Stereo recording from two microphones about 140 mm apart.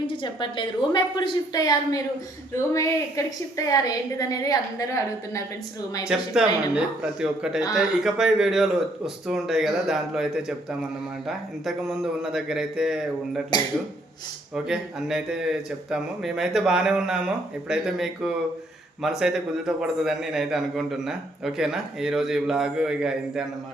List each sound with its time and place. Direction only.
0.1 s a woman's voice: 35° left (ahead or behind)
6.1 s a man's voice: 5° right (ahead or behind)
14.5 s a man's voice: 5° right (ahead or behind)